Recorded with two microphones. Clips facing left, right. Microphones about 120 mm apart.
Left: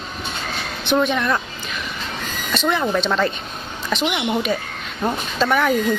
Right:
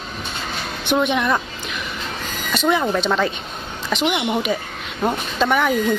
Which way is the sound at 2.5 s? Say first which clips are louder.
Right 1 dB; 5° right (ahead or behind).